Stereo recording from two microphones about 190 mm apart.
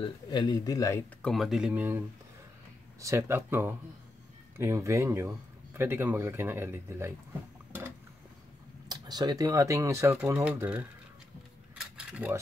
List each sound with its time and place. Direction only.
0.0 s speech: 25° left (ahead or behind)
1.2 s speech: centre (ahead or behind)
8.8 s speech: 20° right (ahead or behind)
11.7 s cutlery: 5° right (ahead or behind)